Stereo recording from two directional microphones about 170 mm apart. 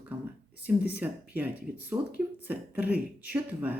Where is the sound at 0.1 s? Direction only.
10° right (ahead or behind).